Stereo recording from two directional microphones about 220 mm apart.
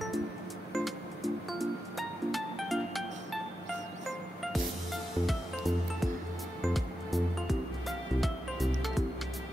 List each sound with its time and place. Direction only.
0.7 s music: centre (ahead or behind)
5.2 s music: centre (ahead or behind)